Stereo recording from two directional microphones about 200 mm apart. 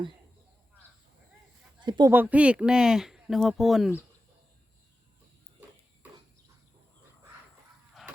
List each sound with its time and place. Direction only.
1.8 s speech: 20° right (ahead or behind)
2.1 s speech: 5° right (ahead or behind)